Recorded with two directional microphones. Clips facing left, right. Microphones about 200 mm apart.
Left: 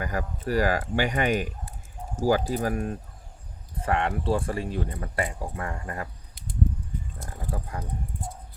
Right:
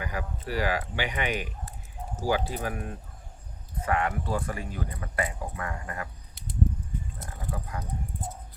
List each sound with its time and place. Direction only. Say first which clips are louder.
0.0 s speech: left 4 dB; 45° left (ahead or behind)
3.8 s speech: left 3 dB; 30° left (ahead or behind)
7.5 s speech: left 2 dB; 30° left (ahead or behind)